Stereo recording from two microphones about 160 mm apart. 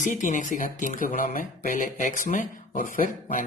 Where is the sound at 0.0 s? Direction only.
55° left (ahead or behind).